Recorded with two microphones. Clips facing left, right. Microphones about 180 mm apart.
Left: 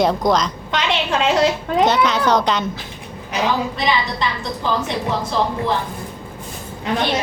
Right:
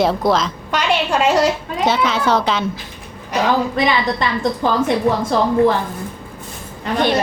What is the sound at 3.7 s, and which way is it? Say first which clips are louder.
A woman's voice: right 3 dB; 50° right (ahead or behind).